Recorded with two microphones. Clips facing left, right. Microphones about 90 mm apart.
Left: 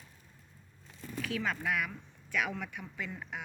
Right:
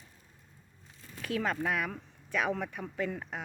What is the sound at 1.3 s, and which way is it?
Speech, 45° right (ahead or behind).